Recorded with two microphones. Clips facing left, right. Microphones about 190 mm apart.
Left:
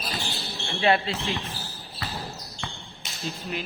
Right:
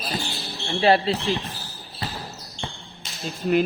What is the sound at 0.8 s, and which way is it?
Speech, 35° right (ahead or behind).